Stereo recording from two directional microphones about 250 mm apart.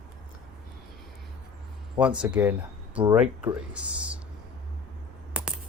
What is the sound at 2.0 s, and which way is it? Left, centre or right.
Speech, centre.